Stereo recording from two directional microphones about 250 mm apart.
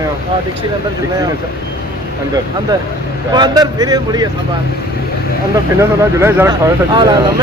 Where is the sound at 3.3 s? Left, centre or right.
Centre.